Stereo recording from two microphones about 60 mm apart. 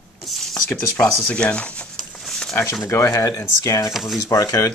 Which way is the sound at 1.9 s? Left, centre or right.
Centre.